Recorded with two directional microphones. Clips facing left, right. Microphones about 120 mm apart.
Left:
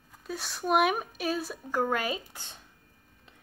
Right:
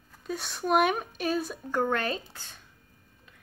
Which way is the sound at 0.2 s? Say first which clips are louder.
Right 2 dB; centre (ahead or behind).